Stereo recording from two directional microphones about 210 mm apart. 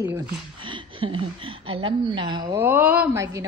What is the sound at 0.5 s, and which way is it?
A woman's voice, 25° right (ahead or behind).